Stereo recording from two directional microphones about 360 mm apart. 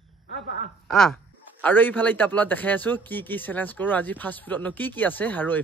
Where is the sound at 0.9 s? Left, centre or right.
Centre.